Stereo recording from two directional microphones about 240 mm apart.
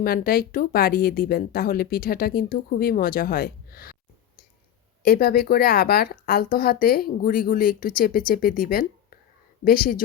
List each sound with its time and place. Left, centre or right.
0.0 s speech: left
5.0 s speech: left